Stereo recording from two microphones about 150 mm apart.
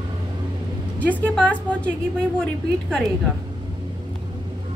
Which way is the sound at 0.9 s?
10° left (ahead or behind).